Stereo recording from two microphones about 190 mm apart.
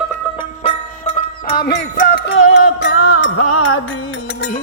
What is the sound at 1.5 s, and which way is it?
Music, 55° left (ahead or behind).